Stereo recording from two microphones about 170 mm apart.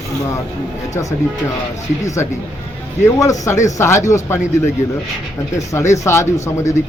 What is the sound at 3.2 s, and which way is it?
A man's voice, 20° left (ahead or behind).